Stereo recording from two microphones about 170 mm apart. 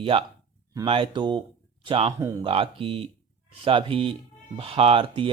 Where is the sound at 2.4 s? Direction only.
35° right (ahead or behind).